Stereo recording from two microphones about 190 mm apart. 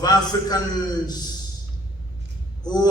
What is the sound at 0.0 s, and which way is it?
Speech, 20° left (ahead or behind).